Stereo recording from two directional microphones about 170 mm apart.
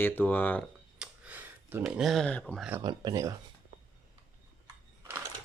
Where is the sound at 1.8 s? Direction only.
Centre (ahead or behind).